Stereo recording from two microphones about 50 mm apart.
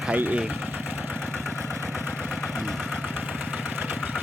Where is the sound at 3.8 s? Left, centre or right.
Right.